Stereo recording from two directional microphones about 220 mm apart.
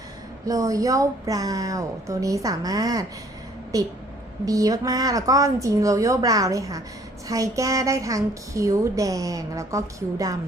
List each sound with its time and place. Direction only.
0.4 s a woman's voice: 15° right (ahead or behind)